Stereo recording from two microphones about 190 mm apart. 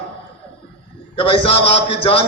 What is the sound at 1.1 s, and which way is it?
A man's voice, 30° left (ahead or behind).